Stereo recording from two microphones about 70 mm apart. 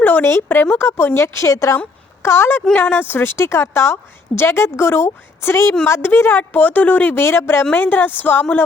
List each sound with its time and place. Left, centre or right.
0.0 s speech: left
2.2 s speech: left